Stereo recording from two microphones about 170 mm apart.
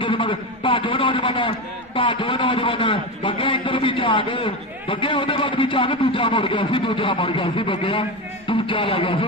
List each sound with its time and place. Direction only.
0.0 s a man's voice: 30° left (ahead or behind)